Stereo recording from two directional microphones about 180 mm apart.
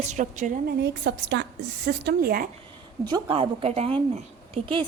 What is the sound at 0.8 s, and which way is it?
A woman's voice, 75° right (ahead or behind).